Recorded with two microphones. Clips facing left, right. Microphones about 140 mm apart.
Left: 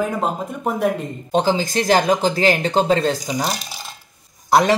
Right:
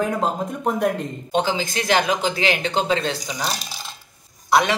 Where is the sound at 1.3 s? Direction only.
40° left (ahead or behind).